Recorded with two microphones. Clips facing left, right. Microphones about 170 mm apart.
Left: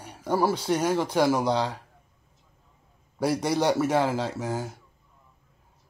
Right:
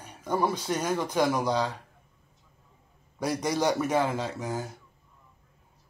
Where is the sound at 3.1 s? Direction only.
10° left (ahead or behind).